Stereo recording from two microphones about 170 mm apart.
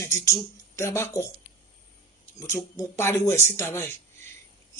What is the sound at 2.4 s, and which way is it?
Speech, 15° left (ahead or behind).